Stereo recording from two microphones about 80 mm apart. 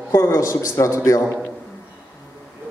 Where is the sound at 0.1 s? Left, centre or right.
Left.